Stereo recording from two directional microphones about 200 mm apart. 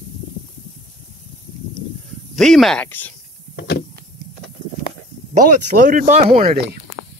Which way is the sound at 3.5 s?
55° left (ahead or behind).